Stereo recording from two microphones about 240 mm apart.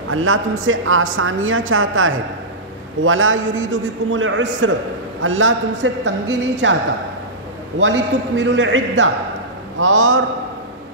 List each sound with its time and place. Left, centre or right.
0.1 s a woman's voice: right
7.8 s a woman's voice: right